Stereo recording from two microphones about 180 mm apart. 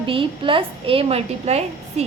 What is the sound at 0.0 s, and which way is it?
A woman's voice, 30° right (ahead or behind).